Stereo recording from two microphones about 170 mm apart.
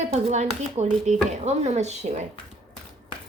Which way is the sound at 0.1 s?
40° right (ahead or behind).